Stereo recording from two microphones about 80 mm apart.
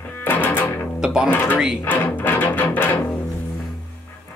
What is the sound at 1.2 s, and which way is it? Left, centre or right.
Music, left.